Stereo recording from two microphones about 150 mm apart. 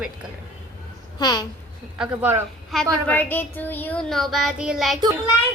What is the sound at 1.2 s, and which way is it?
Speech, 25° left (ahead or behind).